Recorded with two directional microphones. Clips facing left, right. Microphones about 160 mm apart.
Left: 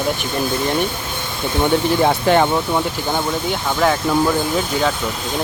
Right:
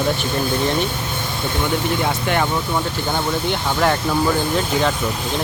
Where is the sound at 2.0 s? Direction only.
30° left (ahead or behind).